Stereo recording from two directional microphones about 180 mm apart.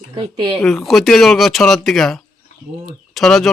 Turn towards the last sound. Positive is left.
turn(degrees=0)  # may be behind; listen again after turning